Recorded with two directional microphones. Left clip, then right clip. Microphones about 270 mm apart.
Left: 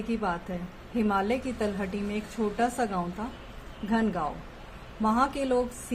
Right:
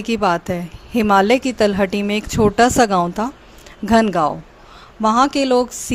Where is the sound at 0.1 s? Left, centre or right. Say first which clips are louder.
Right 14 dB; right.